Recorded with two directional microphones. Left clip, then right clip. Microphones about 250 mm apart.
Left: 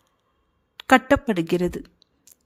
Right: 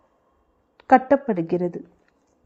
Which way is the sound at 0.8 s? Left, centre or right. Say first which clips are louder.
Right 1 dB; left.